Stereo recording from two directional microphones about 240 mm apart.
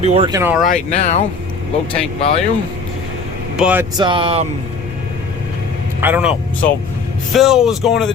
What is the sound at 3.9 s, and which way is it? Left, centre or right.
Speech, centre.